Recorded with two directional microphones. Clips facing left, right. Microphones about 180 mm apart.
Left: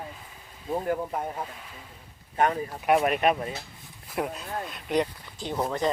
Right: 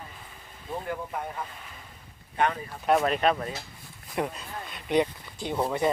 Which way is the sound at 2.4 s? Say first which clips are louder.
Left 2 dB; 40° left (ahead or behind).